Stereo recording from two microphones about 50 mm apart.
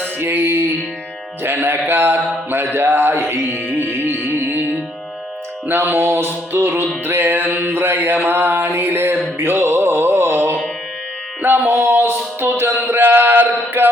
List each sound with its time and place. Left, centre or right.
0.2 s a sound: right
3.7 s music: right
5.6 s music: right
7.0 s mantra: right
9.4 s music: right
10.1 s carnatic music: right
11.4 s music: right